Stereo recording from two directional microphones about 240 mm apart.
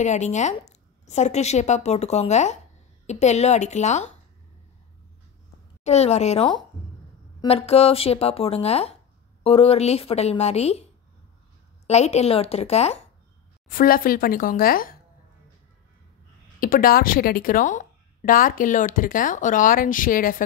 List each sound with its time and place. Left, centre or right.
0.0 s a woman's voice: left
5.9 s a woman's voice: left
11.9 s a woman's voice: left
16.5 s a woman's voice: left